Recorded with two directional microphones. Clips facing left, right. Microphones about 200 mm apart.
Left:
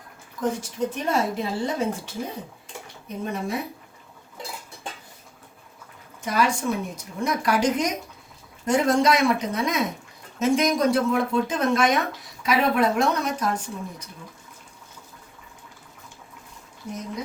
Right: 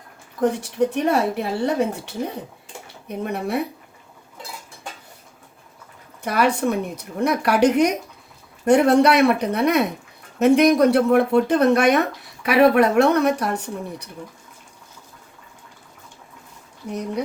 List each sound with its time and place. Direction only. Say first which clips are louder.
0.3 s speech: right 6 dB; 65° right (ahead or behind)
6.2 s speech: right 4 dB; 60° right (ahead or behind)